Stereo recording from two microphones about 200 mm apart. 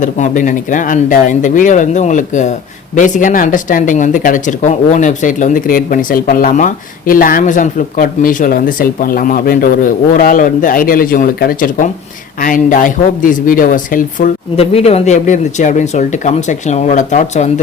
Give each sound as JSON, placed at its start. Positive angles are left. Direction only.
{"t": 0.0, "sound": "speech", "side_deg": 40}
{"t": 14.5, "sound": "speech", "side_deg": 30}